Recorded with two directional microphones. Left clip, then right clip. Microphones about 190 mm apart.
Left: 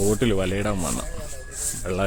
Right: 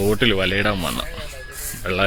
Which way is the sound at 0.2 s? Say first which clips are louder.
Right 5 dB; 15° left (ahead or behind).